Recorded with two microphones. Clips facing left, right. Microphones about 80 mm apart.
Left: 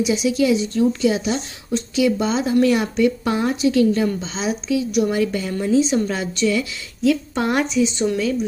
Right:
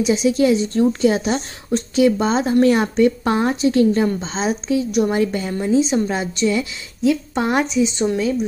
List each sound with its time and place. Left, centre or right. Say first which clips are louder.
0.0 s a woman's voice: right 2 dB; right